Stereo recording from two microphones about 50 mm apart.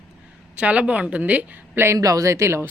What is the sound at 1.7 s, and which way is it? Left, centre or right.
Speech, right.